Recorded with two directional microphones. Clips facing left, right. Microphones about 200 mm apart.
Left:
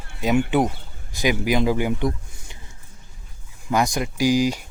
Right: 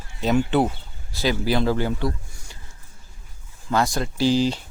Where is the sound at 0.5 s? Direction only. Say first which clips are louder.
Even; 10° left (ahead or behind).